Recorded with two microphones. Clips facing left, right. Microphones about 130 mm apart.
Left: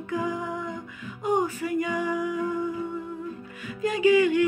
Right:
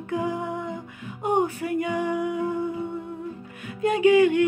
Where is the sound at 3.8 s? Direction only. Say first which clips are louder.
Right 3 dB; 60° right (ahead or behind).